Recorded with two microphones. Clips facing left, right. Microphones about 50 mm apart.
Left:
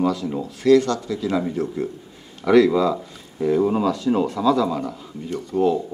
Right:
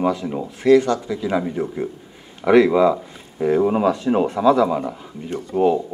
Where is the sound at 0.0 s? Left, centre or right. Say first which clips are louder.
Right 1 dB; right.